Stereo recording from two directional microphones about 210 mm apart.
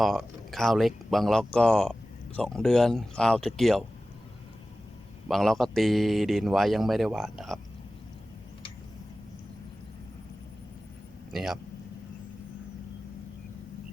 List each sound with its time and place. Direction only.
0.0 s speech: centre (ahead or behind)
5.3 s speech: centre (ahead or behind)
11.3 s speech: centre (ahead or behind)